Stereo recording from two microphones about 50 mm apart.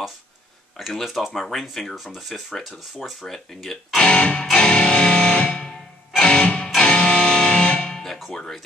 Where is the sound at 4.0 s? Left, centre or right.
Left.